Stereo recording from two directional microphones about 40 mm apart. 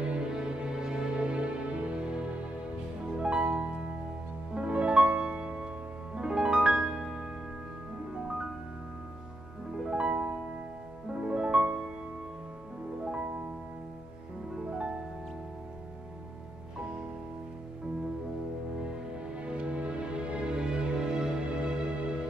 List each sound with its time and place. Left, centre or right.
0.0 s music: right
0.3 s music: centre
9.8 s music: right
13.0 s music: right
14.7 s music: right
19.4 s music: right